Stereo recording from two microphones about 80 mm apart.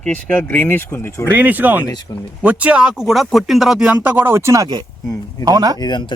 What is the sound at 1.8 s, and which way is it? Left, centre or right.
Speech, left.